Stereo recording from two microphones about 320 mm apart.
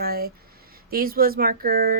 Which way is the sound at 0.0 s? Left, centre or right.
Right.